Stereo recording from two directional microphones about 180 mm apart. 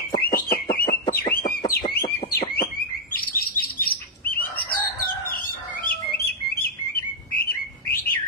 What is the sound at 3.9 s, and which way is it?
Bird, 55° left (ahead or behind).